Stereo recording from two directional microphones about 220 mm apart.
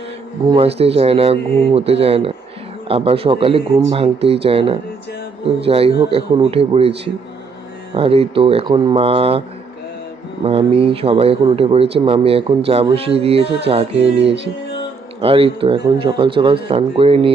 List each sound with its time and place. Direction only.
0.4 s speech: 25° right (ahead or behind)
7.9 s speech: 25° right (ahead or behind)
10.4 s speech: 25° right (ahead or behind)